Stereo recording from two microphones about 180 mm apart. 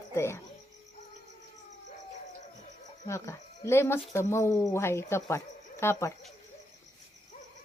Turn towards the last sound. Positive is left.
turn(degrees=15)  # may be behind; listen again after turning